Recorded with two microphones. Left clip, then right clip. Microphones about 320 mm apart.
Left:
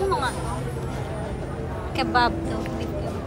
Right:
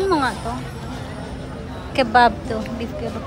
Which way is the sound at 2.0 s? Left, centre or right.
Centre.